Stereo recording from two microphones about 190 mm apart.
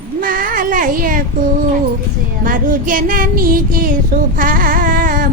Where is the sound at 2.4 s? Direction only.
45° right (ahead or behind).